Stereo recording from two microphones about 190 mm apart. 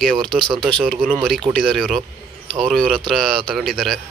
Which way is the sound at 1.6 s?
5° right (ahead or behind).